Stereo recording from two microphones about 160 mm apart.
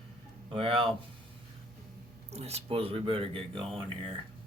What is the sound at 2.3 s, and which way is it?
Speech, 40° right (ahead or behind).